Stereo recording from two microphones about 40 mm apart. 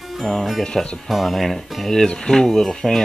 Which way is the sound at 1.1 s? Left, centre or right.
Centre.